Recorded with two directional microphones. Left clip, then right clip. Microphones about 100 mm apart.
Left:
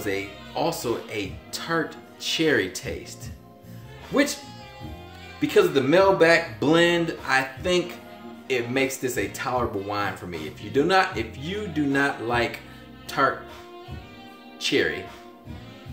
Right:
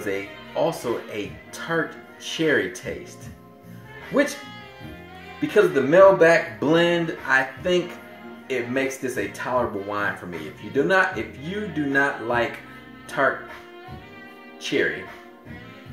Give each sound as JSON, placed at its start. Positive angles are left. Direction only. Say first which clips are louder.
{"t": 0.0, "sound": "speech", "louder": "even", "side_deg": 20}
{"t": 5.4, "sound": "speech", "louder": "right 1 dB", "side_deg": 15}
{"t": 14.6, "sound": "speech", "louder": "even", "side_deg": 20}